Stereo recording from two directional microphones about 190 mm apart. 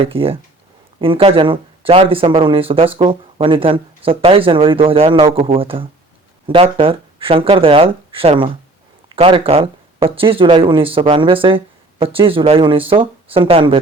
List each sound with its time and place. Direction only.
0.0 s speech: 30° right (ahead or behind)